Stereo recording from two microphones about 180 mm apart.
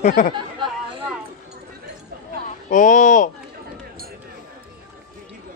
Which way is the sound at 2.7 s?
45° left (ahead or behind).